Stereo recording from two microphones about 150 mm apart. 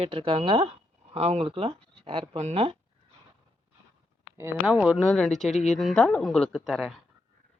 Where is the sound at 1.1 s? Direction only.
45° right (ahead or behind).